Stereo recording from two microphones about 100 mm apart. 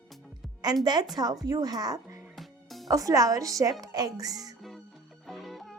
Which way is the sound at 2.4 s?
Centre (ahead or behind).